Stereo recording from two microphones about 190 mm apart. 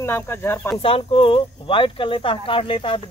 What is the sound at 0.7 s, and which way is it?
Speech, 30° left (ahead or behind).